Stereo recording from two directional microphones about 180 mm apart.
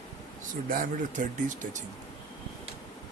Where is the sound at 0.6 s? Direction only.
50° right (ahead or behind).